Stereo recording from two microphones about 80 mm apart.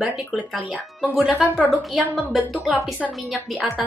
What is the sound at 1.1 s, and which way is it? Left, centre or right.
A woman's voice, centre.